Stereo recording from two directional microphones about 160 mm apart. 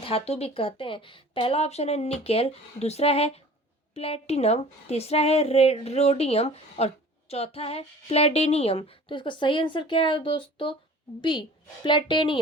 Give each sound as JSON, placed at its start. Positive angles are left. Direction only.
{"t": 0.0, "sound": "a woman's voice", "side_deg": 40}